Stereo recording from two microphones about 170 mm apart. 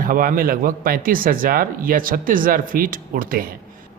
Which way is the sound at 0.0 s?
55° right (ahead or behind).